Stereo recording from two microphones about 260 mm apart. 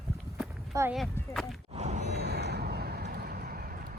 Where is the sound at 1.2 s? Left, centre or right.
Centre.